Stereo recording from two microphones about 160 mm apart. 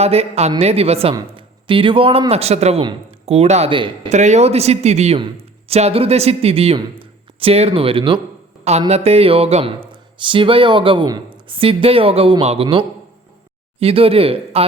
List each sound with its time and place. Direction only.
0.0 s speech: 40° right (ahead or behind)
4.1 s speech: 45° right (ahead or behind)